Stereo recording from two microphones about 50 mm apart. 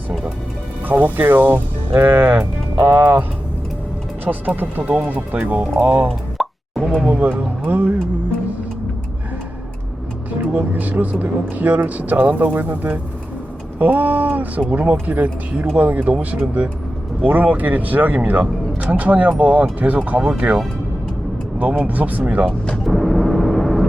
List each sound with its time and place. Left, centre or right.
0.9 s speech: right
4.3 s speech: right
4.8 s speech: right
6.3 s plop: centre
7.1 s speech: right
10.5 s speech: right
17.2 s speech: right
20.2 s speech: right
21.8 s speech: right
22.8 s vehicle: centre